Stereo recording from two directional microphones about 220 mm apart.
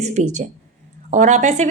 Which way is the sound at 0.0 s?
35° right (ahead or behind).